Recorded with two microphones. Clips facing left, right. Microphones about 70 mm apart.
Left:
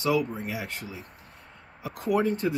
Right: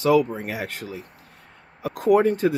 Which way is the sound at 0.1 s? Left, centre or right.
Right.